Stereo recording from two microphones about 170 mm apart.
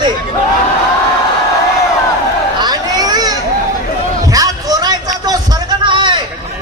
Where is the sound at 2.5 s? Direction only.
25° right (ahead or behind).